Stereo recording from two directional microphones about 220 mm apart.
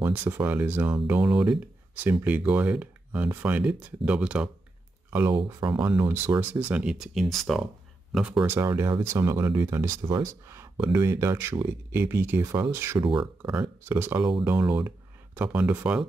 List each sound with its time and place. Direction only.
0.0 s speech: 10° right (ahead or behind)
5.3 s speech: 20° right (ahead or behind)
5.9 s speech: 10° right (ahead or behind)
13.0 s speech: 25° right (ahead or behind)
13.4 s speech: 5° right (ahead or behind)